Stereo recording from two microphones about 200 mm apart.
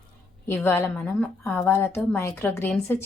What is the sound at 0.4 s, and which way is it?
A woman's voice, 10° left (ahead or behind).